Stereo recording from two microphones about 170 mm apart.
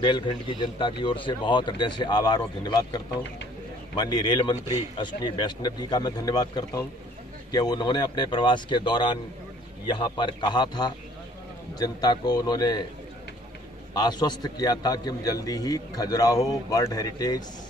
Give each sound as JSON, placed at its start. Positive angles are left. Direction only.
{"t": 0.0, "sound": "a man's voice", "side_deg": 30}
{"t": 13.9, "sound": "a man's voice", "side_deg": 25}